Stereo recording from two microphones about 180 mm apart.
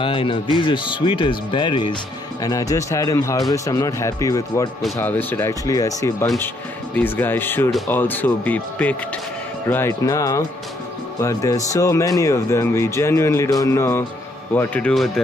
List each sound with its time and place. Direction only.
0.0 s speech: 30° left (ahead or behind); by 15.2 s 5° left (ahead or behind)